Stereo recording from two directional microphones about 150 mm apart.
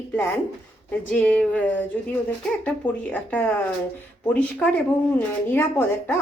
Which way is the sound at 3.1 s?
10° left (ahead or behind).